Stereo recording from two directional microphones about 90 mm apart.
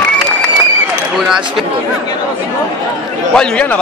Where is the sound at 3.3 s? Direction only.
10° left (ahead or behind).